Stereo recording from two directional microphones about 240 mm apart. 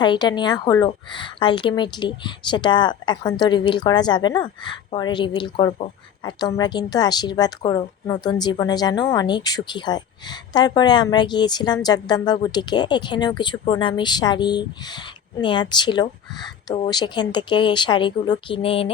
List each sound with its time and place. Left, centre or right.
0.0 s a woman's voice: centre